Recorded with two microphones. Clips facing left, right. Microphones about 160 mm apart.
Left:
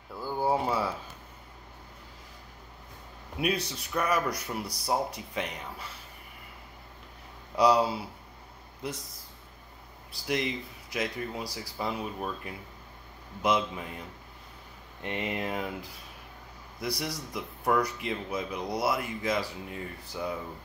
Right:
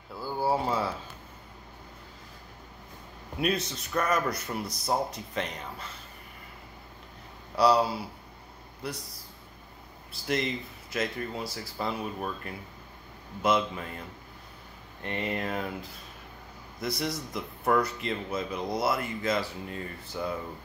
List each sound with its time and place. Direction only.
0.1 s a sound: 10° right (ahead or behind)
0.7 s speech: 10° left (ahead or behind)
3.3 s speech: 10° left (ahead or behind)
7.5 s speech: 15° left (ahead or behind)
10.2 s speech: 15° left (ahead or behind)
15.0 s speech: 15° left (ahead or behind)
16.8 s speech: 10° left (ahead or behind)